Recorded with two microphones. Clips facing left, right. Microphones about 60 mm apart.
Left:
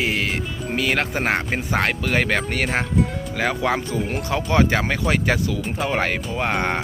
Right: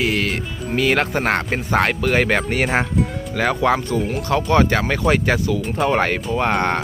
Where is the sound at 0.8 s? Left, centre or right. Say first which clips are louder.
Right 4 dB; centre.